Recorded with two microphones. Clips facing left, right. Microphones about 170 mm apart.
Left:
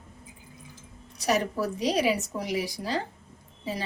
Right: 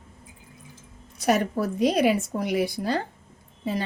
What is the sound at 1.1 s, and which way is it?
A woman's voice, 50° right (ahead or behind).